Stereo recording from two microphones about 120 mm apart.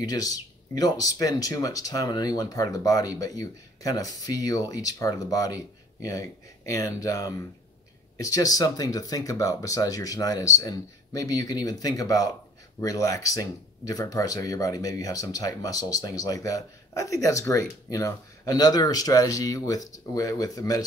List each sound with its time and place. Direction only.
0.0 s speech: 30° left (ahead or behind)